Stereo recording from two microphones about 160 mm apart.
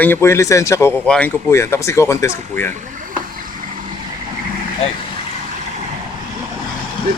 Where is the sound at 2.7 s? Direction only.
55° right (ahead or behind).